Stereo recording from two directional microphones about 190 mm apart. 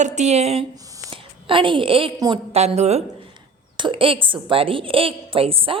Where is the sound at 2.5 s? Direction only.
35° right (ahead or behind).